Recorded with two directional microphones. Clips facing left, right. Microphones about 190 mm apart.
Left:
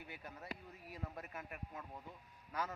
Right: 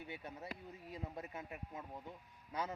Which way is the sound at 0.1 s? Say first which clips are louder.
Right 1 dB; 25° right (ahead or behind).